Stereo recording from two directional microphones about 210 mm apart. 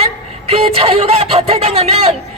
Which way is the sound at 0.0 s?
30° right (ahead or behind).